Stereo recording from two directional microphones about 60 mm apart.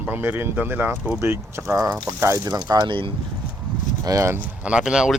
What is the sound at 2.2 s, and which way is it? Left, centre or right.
Speech, right.